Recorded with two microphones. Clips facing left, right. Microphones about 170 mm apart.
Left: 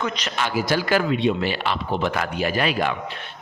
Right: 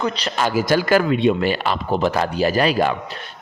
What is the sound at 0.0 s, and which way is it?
Speech, 35° right (ahead or behind).